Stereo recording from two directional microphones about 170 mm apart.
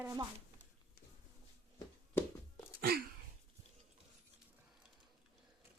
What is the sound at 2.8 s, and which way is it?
Sneeze, 65° right (ahead or behind).